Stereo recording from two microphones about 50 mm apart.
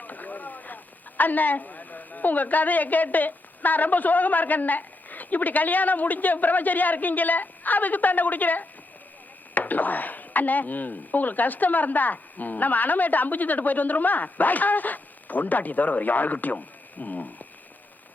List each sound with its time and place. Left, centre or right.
0.0 s speech: left